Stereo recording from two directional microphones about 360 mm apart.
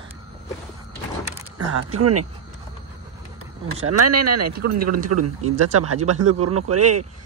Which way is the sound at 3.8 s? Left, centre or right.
Right.